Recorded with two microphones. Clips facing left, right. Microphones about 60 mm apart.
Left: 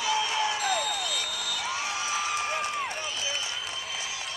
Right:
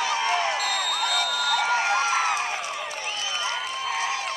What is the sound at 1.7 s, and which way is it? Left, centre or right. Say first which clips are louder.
Crowd: right 8 dB; right.